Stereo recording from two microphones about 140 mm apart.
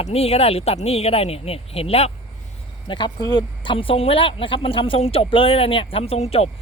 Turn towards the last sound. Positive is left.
turn(degrees=45)  # may be behind; listen again after turning